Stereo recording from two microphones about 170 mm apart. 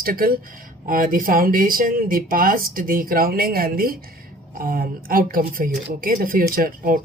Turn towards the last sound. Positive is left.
turn(degrees=-60)  # may be behind; listen again after turning